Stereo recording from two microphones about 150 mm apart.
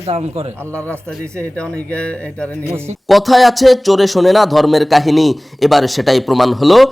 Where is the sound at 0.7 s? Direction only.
10° left (ahead or behind).